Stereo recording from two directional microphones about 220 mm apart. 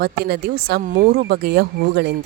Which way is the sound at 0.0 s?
45° right (ahead or behind).